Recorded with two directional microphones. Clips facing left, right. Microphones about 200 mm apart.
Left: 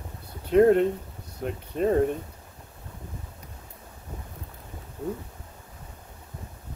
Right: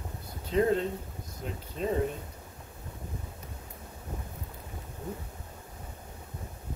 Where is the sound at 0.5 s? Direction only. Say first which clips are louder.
Left 8 dB; 60° left (ahead or behind).